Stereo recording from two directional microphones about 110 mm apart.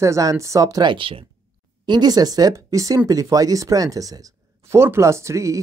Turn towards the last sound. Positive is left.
turn(degrees=-30)  # may be behind; listen again after turning